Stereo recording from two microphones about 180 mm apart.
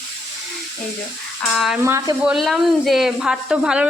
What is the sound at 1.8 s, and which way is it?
Speech, 15° right (ahead or behind).